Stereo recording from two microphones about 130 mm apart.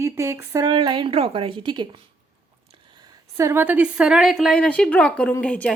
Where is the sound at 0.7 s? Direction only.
40° right (ahead or behind).